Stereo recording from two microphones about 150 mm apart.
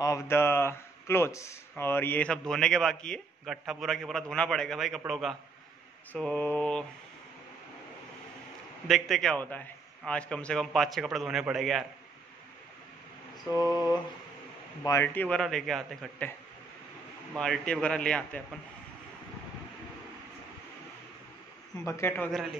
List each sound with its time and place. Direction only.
0.0 s speech: 20° left (ahead or behind); by 5.3 s centre (ahead or behind)
6.1 s mantra: 10° left (ahead or behind)
8.8 s speech: centre (ahead or behind)
13.5 s a sound: 25° left (ahead or behind)
14.8 s speech: 15° left (ahead or behind)
17.4 s speech: 5° left (ahead or behind)
21.8 s mantra: 15° left (ahead or behind)
22.3 s speech: centre (ahead or behind)